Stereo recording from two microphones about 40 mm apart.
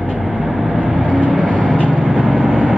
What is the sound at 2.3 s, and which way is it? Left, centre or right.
Vehicle, centre.